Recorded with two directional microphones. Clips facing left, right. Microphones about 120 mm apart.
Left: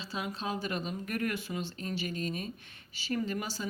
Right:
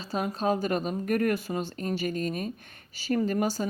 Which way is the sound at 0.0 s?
45° right (ahead or behind).